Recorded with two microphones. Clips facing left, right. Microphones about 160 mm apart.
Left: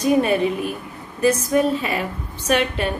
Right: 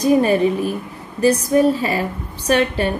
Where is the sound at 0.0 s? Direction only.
35° right (ahead or behind).